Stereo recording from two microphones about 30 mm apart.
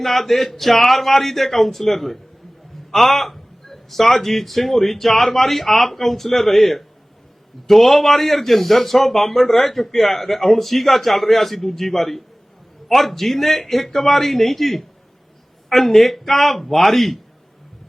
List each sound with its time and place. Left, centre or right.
0.0 s a man's voice: centre